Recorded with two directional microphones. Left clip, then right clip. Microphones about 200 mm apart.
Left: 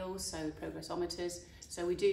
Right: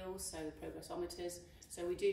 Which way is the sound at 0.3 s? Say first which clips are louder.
Left 5 dB; 15° left (ahead or behind).